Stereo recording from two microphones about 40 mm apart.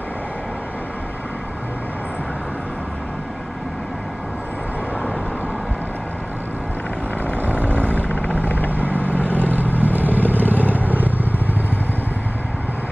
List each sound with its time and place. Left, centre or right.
7.4 s vehicle: right
8.5 s vehicle: left
8.7 s vehicle: right